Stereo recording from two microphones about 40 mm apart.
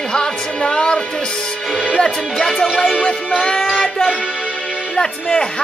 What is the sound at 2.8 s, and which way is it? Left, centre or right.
Speech, left.